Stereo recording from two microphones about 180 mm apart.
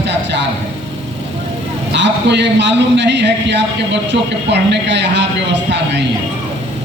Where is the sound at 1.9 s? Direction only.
75° right (ahead or behind).